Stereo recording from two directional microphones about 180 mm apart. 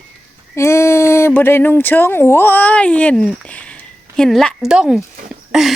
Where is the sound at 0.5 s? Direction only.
15° left (ahead or behind); by 5.0 s 5° right (ahead or behind).